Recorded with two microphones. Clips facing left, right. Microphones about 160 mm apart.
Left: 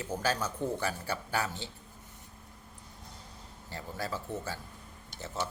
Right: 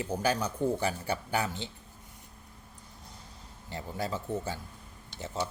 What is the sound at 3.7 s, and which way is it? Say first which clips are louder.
A man's voice: right 3 dB; 20° right (ahead or behind).